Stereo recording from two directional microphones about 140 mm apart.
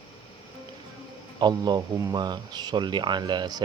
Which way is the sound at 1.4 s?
30° right (ahead or behind).